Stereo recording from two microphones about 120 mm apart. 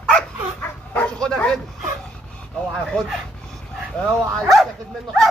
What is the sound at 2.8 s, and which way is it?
Speech, centre (ahead or behind).